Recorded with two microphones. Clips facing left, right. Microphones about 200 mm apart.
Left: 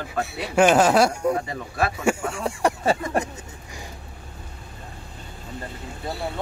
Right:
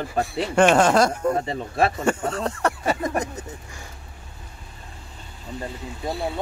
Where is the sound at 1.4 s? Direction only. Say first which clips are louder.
Right 4 dB; 25° right (ahead or behind).